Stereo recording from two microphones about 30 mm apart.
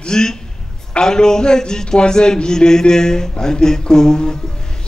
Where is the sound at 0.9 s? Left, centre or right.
Left.